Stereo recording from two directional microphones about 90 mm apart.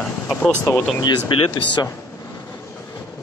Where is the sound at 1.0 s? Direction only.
55° left (ahead or behind).